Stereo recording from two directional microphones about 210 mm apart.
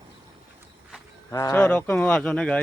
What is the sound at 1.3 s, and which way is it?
Speech, 15° left (ahead or behind).